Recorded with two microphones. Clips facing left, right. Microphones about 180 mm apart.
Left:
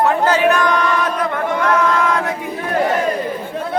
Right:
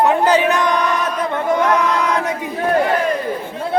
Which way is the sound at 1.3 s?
20° right (ahead or behind).